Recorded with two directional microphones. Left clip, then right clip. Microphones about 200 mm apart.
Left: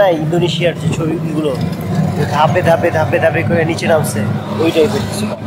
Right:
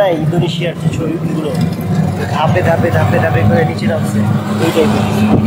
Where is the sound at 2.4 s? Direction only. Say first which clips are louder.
Left 2 dB; 30° left (ahead or behind).